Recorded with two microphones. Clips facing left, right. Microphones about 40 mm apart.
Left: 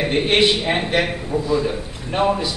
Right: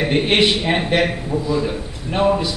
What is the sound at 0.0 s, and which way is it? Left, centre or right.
A man's voice, centre.